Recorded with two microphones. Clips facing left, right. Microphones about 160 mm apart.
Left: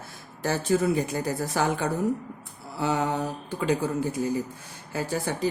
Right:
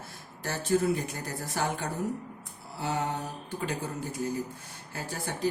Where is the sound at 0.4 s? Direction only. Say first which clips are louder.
Left 3 dB; 90° left.